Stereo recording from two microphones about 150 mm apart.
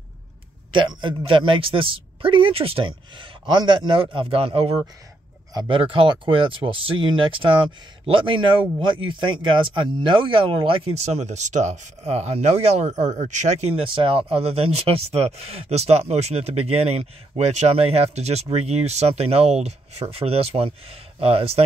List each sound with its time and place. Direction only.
0.7 s speech: 35° right (ahead or behind)
5.5 s speech: 30° right (ahead or behind)